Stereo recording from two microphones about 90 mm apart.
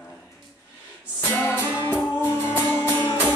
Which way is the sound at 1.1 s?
30° left (ahead or behind).